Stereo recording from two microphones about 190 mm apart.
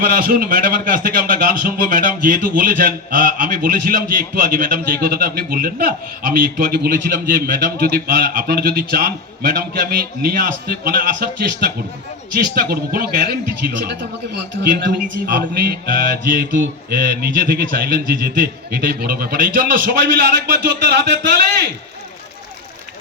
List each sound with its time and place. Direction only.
0.0 s a man's voice: 50° right (ahead or behind)